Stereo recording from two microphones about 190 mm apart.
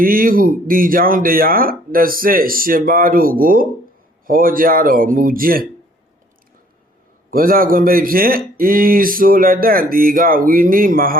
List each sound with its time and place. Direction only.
0.0 s speech: 50° right (ahead or behind)
7.3 s speech: 50° right (ahead or behind)